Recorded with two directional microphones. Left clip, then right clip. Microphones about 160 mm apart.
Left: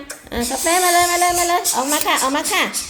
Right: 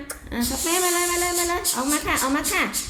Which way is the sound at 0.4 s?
5° right (ahead or behind).